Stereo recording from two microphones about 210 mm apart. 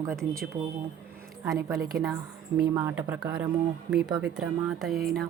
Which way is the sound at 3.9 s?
5° right (ahead or behind).